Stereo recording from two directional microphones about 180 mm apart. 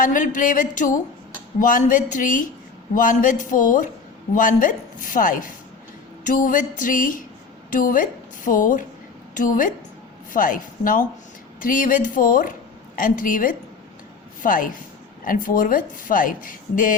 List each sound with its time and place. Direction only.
0.0 s a woman's voice: 45° left (ahead or behind)